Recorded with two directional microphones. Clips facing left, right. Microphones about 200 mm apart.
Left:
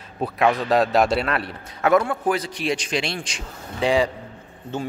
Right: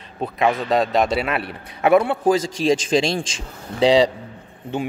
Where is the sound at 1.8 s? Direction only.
15° right (ahead or behind).